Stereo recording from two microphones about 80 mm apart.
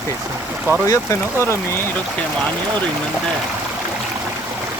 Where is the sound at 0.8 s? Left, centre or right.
Left.